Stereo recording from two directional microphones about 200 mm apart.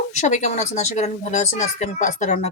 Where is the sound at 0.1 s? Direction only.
35° left (ahead or behind).